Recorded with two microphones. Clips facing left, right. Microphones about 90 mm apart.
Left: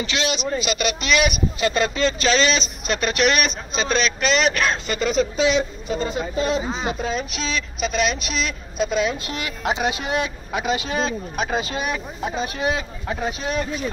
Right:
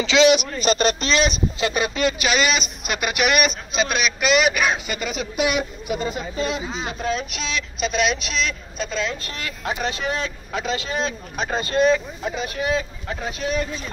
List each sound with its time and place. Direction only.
0.0 s a man's voice: 90° right
0.6 s speech: 40° right (ahead or behind)
1.7 s speech: 15° right (ahead or behind)
6.4 s speech: 35° left (ahead or behind)
7.0 s speech: 5° left (ahead or behind)
11.0 s speech: 5° left (ahead or behind)
12.4 s speech: 20° left (ahead or behind)